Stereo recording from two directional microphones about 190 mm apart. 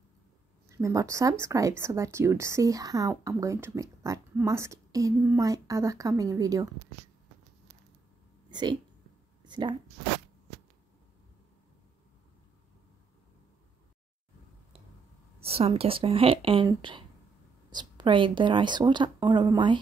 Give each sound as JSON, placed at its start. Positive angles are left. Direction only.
{"t": 0.7, "sound": "a woman's voice", "side_deg": -15}
{"t": 8.5, "sound": "speech", "side_deg": -25}
{"t": 9.4, "sound": "a sound", "side_deg": -25}
{"t": 15.4, "sound": "a woman's voice", "side_deg": -30}